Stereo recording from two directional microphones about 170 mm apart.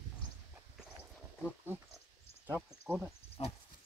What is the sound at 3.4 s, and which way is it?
Pig, 35° left (ahead or behind).